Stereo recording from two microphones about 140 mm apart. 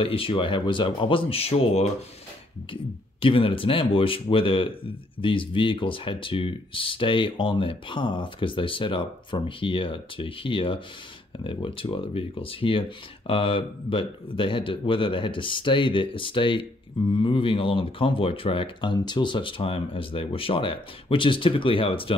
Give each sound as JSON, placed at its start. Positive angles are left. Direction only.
{"t": 0.0, "sound": "speech", "side_deg": 40}